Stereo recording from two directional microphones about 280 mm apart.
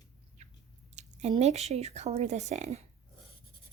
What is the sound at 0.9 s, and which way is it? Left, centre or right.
Speech, right.